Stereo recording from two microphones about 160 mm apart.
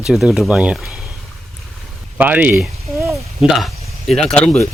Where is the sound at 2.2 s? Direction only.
10° right (ahead or behind).